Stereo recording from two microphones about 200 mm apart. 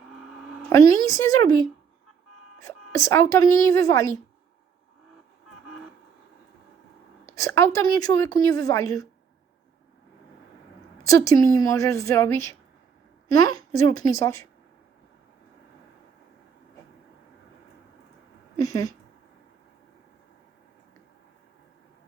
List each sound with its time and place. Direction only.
0.7 s a woman's voice: 15° left (ahead or behind)
2.6 s a woman's voice: 15° left (ahead or behind)
7.3 s a woman's voice: 15° left (ahead or behind)
11.0 s a woman's voice: 15° left (ahead or behind)
18.5 s speech: 15° left (ahead or behind)